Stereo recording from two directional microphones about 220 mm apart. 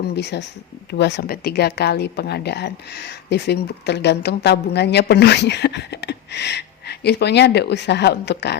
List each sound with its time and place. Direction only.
0.2 s speech: 50° left (ahead or behind)